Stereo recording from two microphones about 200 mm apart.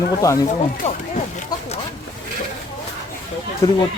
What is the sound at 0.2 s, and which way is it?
Speech, 15° left (ahead or behind).